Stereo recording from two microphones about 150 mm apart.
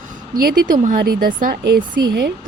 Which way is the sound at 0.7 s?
60° right (ahead or behind).